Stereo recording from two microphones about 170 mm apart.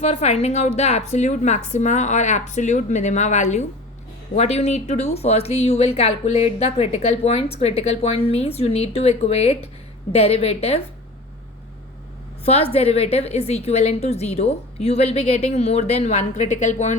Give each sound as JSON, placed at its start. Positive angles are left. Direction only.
{"t": 0.0, "sound": "a woman's voice", "side_deg": 40}
{"t": 12.7, "sound": "a woman's voice", "side_deg": 35}